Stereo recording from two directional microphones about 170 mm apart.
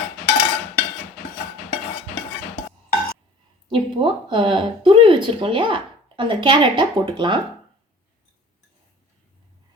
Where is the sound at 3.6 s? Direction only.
30° right (ahead or behind).